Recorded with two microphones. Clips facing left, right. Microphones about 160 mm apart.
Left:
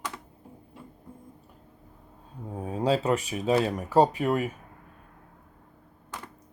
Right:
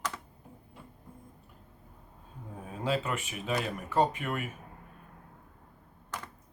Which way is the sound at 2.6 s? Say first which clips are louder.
Left 6 dB; 40° left (ahead or behind).